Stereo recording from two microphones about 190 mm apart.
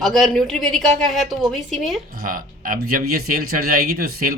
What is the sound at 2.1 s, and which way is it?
Speech, 45° right (ahead or behind).